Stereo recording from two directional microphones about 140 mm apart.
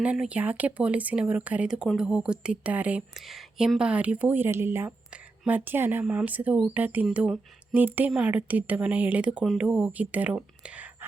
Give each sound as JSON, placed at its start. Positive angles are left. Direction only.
{"t": 0.0, "sound": "speech", "side_deg": -10}